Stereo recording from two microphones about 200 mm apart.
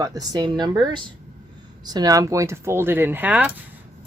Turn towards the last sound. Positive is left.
turn(degrees=-5)  # may be behind; listen again after turning